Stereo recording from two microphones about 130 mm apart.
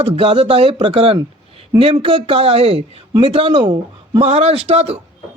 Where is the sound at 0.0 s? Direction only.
45° right (ahead or behind).